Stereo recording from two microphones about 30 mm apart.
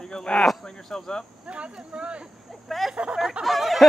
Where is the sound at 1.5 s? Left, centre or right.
Right.